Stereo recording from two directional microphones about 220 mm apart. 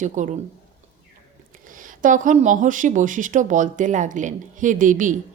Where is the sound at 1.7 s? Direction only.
35° right (ahead or behind).